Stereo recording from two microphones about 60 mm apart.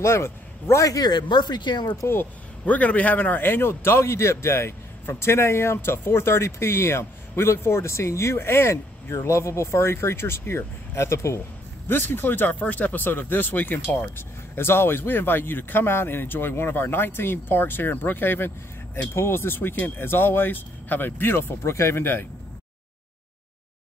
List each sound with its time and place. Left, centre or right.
0.0 s a man's voice: left
2.0 s a man's voice: left
2.6 s a man's voice: left
11.9 s speech: left